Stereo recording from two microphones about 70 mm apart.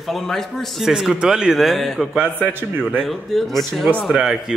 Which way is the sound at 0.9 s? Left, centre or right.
Centre.